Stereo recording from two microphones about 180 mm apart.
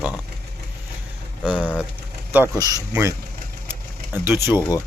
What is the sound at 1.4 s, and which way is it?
Speech, 5° right (ahead or behind).